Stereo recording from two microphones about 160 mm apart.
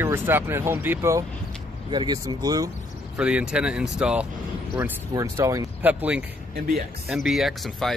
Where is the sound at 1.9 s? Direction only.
25° right (ahead or behind).